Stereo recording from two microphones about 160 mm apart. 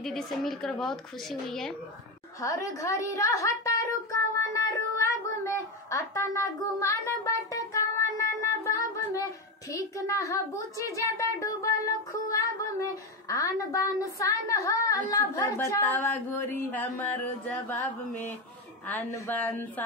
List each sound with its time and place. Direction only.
0.0 s speech: centre (ahead or behind)
2.4 s a woman's voice: 20° left (ahead or behind)
4.1 s child singing: 20° left (ahead or behind)
9.7 s a child's voice: 20° left (ahead or behind)